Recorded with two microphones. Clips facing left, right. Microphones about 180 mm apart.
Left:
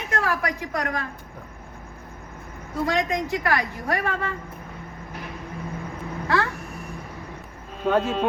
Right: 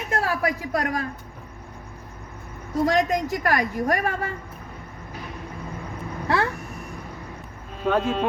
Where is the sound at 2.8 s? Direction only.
45° right (ahead or behind).